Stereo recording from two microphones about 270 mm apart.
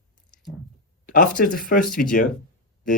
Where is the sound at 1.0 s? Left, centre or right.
Left.